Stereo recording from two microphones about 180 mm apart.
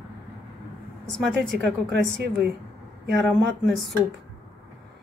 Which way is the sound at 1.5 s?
65° right (ahead or behind).